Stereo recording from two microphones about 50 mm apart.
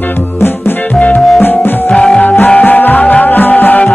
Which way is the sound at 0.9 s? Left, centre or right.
Left.